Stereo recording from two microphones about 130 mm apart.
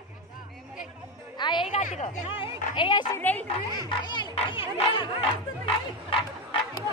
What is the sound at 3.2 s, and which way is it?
Speech, 15° left (ahead or behind).